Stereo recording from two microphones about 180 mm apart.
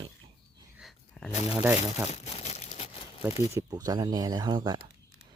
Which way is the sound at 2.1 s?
35° left (ahead or behind).